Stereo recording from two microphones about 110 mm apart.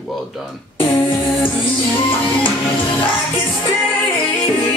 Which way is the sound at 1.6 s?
55° left (ahead or behind).